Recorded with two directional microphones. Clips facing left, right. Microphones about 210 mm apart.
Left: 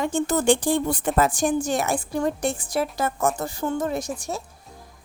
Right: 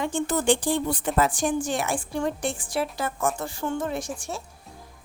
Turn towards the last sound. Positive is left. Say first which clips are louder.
# left 3 dB
turn(degrees=40)  # may be behind; listen again after turning